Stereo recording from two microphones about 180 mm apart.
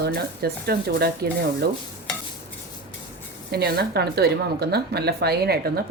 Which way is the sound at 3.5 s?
60° right (ahead or behind).